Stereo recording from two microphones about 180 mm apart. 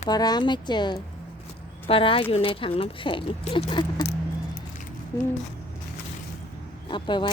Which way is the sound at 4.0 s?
65° left (ahead or behind).